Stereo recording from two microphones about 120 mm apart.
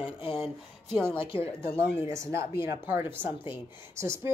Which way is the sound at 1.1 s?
50° left (ahead or behind).